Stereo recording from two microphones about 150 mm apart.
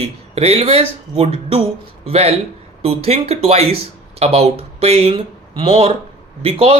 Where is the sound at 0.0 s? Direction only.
45° right (ahead or behind).